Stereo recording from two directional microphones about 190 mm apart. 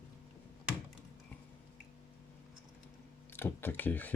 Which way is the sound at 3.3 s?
10° left (ahead or behind).